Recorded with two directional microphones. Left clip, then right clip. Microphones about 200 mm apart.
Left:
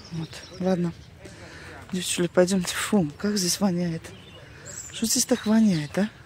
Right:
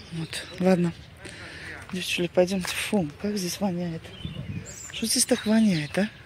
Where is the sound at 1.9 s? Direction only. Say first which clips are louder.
Left 1 dB; 25° left (ahead or behind).